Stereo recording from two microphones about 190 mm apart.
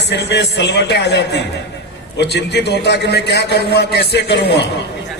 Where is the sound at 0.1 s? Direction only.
60° left (ahead or behind).